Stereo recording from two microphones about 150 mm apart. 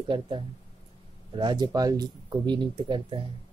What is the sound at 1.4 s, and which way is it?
Speech, 30° right (ahead or behind).